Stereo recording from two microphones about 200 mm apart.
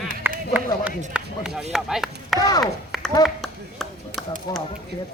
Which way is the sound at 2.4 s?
20° left (ahead or behind).